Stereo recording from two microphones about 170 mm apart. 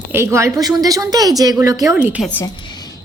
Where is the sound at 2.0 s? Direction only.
10° right (ahead or behind).